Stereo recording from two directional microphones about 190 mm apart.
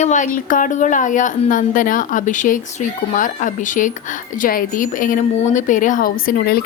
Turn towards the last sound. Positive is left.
turn(degrees=50)  # may be behind; listen again after turning